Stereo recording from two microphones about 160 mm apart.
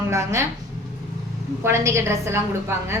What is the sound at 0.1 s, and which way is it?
Speech, 20° right (ahead or behind).